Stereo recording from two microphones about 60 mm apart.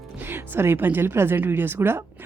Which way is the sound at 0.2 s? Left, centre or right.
Right.